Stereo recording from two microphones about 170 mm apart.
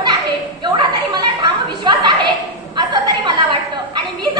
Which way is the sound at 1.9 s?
25° right (ahead or behind).